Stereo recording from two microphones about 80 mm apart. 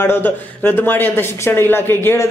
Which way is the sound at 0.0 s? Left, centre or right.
Left.